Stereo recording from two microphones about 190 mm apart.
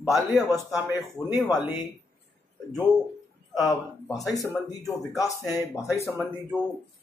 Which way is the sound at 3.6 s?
15° left (ahead or behind).